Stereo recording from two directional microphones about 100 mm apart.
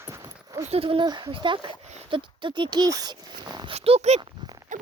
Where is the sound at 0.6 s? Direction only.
80° right.